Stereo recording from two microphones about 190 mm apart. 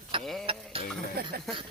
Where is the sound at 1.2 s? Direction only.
55° right (ahead or behind).